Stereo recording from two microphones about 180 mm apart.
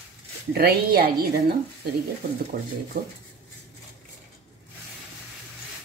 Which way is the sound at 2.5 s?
50° right (ahead or behind).